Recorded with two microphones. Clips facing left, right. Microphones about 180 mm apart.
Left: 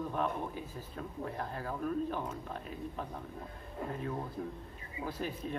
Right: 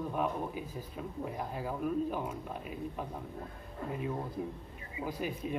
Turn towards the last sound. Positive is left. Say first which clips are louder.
# right 2 dB
turn(degrees=-10)  # may be behind; listen again after turning